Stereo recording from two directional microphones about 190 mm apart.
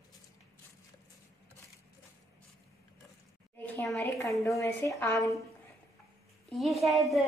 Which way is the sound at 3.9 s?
15° left (ahead or behind).